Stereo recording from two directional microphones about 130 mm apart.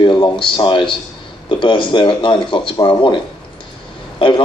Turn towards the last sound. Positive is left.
turn(degrees=40)  # may be behind; listen again after turning